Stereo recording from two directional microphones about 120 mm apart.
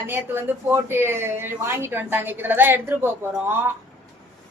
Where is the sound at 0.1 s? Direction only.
15° right (ahead or behind).